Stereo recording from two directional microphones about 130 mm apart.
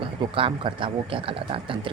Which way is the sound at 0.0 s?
45° right (ahead or behind).